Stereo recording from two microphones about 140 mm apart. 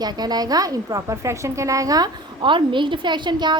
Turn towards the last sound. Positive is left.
turn(degrees=-30)  # may be behind; listen again after turning